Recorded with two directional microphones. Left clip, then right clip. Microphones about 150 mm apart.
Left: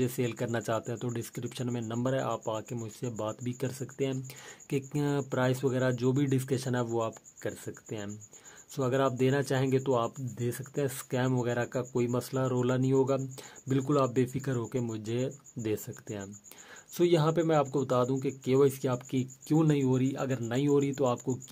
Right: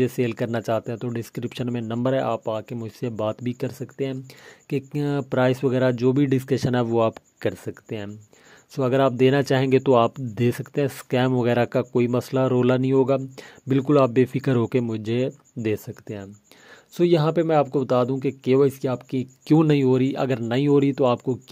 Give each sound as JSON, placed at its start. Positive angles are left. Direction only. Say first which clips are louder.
{"t": 0.0, "sound": "speech", "louder": "right 8 dB", "side_deg": -35}
{"t": 19.4, "sound": "speech", "louder": "right 10 dB", "side_deg": -50}